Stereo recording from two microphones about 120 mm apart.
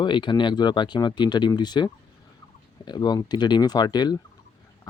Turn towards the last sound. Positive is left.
turn(degrees=35)  # may be behind; listen again after turning